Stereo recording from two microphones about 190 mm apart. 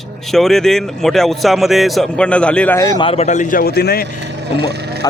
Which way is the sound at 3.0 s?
30° left (ahead or behind).